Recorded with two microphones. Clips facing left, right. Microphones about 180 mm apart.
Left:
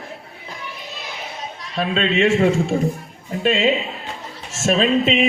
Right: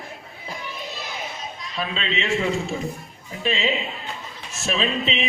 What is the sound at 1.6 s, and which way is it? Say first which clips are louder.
A man's voice: left 8 dB; 65° left (ahead or behind).